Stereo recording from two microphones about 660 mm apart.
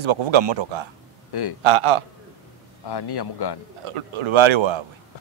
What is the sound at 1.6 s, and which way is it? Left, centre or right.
Speech, right.